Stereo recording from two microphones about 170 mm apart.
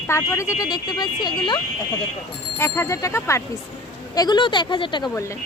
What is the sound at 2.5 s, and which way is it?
A woman's voice, 15° left (ahead or behind).